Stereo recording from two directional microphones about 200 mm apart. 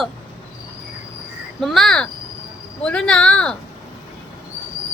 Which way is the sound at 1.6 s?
Centre (ahead or behind).